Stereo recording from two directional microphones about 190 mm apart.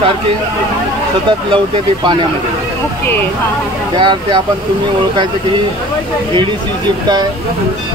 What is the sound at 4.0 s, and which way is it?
Speech, 25° right (ahead or behind).